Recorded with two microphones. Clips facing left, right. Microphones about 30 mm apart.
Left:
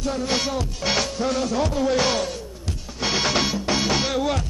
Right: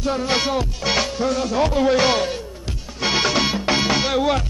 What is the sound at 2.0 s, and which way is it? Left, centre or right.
Music, centre.